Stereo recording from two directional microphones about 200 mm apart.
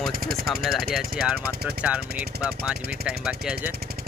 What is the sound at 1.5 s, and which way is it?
Speech, 50° right (ahead or behind).